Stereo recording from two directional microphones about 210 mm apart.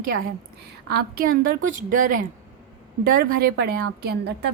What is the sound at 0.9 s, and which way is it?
A woman's voice, 45° right (ahead or behind).